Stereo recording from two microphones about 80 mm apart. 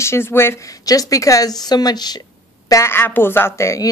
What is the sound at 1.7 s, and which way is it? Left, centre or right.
Speech, left.